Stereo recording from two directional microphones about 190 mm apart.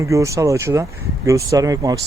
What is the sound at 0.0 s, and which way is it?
Speech, 15° right (ahead or behind).